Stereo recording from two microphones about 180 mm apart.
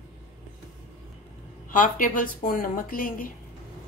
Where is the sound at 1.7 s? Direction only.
50° left (ahead or behind).